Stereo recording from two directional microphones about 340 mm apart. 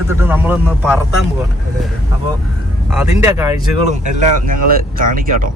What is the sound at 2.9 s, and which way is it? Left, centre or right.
Speech, centre.